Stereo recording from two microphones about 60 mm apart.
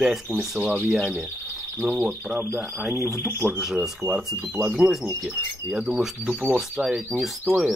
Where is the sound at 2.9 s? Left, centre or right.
Right.